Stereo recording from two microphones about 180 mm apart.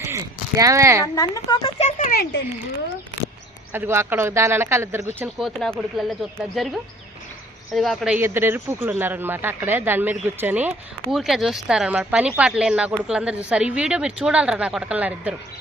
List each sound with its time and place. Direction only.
0.0 s a sound: 15° right (ahead or behind)
1.0 s speech: 20° left (ahead or behind)
2.0 s speech: 50° left (ahead or behind)
3.7 s speech: 15° right (ahead or behind)
5.4 s speech: centre (ahead or behind)